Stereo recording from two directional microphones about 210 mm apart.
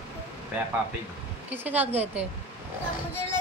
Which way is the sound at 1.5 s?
10° right (ahead or behind).